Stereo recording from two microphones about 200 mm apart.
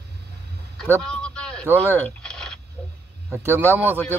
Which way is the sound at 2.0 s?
5° left (ahead or behind).